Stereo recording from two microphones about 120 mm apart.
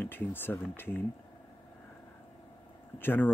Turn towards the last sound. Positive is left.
turn(degrees=15)  # may be behind; listen again after turning